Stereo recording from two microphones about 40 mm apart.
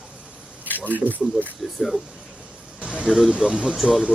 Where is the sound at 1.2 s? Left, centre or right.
Centre.